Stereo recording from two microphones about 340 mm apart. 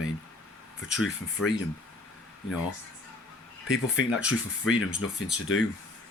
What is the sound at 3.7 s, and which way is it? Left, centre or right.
Speech, left.